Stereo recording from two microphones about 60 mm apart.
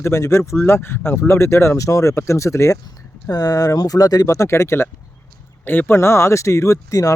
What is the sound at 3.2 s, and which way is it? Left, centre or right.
Speech, left.